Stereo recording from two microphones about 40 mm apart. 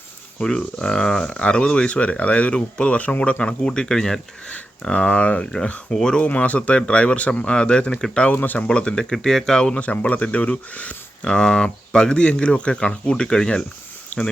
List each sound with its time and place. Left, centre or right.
0.4 s speech: centre
4.9 s speech: left
5.9 s speech: centre
6.2 s speech: left
8.3 s speech: left
8.6 s speech: left
9.1 s speech: centre
9.7 s speech: left
11.3 s speech: left
13.1 s speech: centre
14.1 s speech: left